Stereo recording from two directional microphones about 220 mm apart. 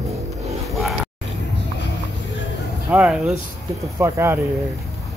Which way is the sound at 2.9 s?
5° right (ahead or behind).